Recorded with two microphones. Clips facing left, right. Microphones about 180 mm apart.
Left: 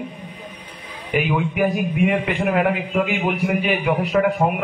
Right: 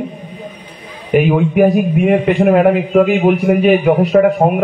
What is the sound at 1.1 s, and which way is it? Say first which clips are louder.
A man's voice: right 9 dB; 45° right (ahead or behind).